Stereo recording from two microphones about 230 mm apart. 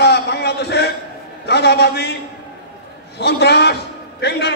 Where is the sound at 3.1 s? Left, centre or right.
Left.